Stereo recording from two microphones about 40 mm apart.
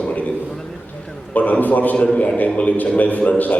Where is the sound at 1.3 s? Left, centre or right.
Left.